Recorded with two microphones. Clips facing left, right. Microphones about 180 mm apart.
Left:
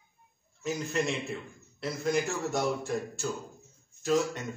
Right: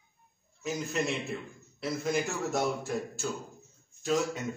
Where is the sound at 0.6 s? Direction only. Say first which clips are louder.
Left 1 dB; centre (ahead or behind).